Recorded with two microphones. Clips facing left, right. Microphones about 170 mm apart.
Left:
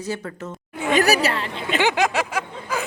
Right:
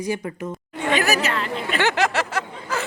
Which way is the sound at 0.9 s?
40° left (ahead or behind).